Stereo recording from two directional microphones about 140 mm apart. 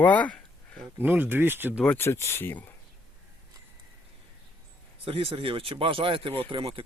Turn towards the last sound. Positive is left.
turn(degrees=-40)  # may be behind; listen again after turning